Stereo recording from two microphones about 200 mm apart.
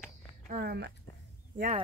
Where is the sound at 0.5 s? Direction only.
50° right (ahead or behind).